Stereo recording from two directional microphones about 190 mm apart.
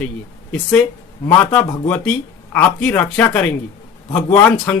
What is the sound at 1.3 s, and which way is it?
A man's voice, 15° left (ahead or behind).